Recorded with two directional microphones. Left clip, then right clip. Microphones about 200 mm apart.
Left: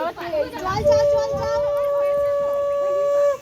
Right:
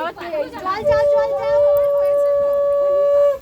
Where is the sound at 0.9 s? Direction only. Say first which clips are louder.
Even; 25° right (ahead or behind).